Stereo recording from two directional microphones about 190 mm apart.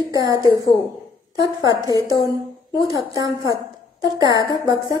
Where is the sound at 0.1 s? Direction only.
20° right (ahead or behind).